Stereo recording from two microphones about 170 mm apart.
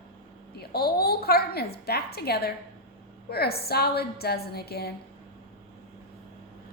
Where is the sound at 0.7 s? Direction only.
65° left (ahead or behind).